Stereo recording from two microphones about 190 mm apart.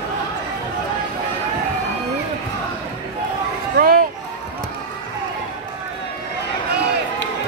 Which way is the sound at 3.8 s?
50° right (ahead or behind).